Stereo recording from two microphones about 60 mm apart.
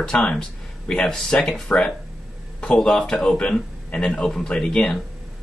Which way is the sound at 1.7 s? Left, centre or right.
Left.